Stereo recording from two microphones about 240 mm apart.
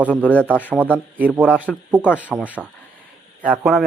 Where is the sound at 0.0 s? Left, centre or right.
Centre.